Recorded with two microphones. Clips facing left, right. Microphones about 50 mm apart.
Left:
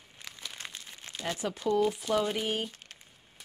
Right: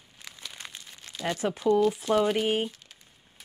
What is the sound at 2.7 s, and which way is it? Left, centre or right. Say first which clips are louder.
Crumpling: left 2 dB; left.